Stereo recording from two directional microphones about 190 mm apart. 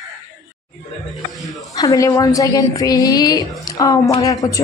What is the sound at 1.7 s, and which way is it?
A woman's voice, 15° left (ahead or behind).